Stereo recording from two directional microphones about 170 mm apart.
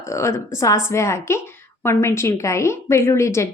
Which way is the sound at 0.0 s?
15° left (ahead or behind).